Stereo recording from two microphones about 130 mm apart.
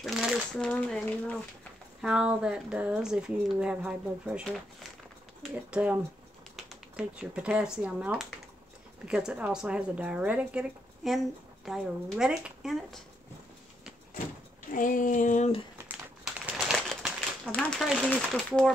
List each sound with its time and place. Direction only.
0.0 s speech: centre (ahead or behind)
2.0 s speech: 5° right (ahead or behind)
5.7 s speech: 10° right (ahead or behind)
7.0 s speech: 10° right (ahead or behind)
14.7 s speech: 90° left; by 15.5 s 75° left (ahead or behind)
16.3 s a sound: 5° right (ahead or behind)
17.5 s speech: 5° left (ahead or behind)